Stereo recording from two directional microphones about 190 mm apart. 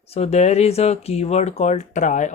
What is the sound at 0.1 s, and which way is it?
Speech, 35° left (ahead or behind).